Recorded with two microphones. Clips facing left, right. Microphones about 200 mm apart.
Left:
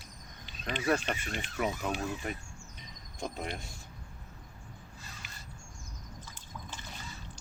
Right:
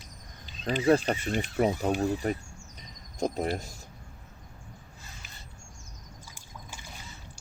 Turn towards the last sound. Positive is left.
turn(degrees=-10)  # may be behind; listen again after turning